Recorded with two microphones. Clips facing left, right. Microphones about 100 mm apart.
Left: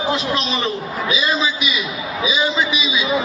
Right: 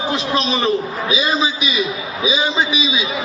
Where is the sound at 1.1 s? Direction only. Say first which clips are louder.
Right 2 dB; 25° right (ahead or behind).